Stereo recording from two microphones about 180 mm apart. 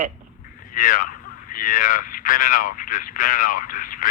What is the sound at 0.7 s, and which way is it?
Speech, 50° left (ahead or behind).